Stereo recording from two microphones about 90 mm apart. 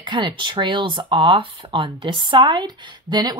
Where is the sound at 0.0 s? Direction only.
60° right (ahead or behind).